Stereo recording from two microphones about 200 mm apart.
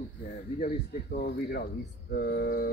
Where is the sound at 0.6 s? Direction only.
45° left (ahead or behind).